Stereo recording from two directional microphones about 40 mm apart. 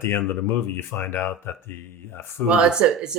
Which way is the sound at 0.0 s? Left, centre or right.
Left.